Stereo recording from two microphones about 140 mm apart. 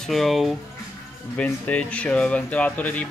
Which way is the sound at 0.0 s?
Centre (ahead or behind).